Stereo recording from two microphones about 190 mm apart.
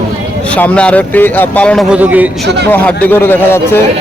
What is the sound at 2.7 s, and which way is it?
Speech, 10° left (ahead or behind).